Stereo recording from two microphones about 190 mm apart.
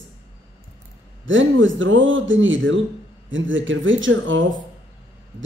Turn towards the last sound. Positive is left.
turn(degrees=-85)